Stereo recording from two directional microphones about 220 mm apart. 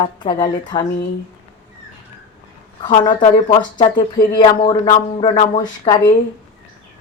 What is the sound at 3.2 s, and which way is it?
Speech, 35° left (ahead or behind).